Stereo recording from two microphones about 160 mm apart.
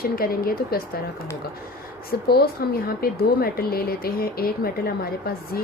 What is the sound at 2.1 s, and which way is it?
Speech, 75° left (ahead or behind).